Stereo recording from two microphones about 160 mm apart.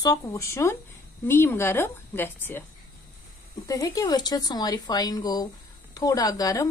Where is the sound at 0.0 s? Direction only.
20° left (ahead or behind).